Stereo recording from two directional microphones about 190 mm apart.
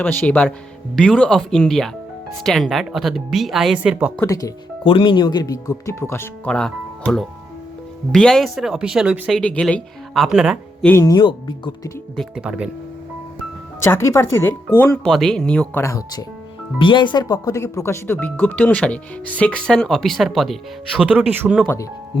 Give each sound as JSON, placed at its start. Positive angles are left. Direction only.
{"t": 0.0, "sound": "speech", "side_deg": 10}
{"t": 4.2, "sound": "speech", "side_deg": 15}
{"t": 4.8, "sound": "speech", "side_deg": 25}
{"t": 9.4, "sound": "speech", "side_deg": 5}
{"t": 10.8, "sound": "speech", "side_deg": 15}
{"t": 12.1, "sound": "speech", "side_deg": 0}
{"t": 13.8, "sound": "speech", "side_deg": 15}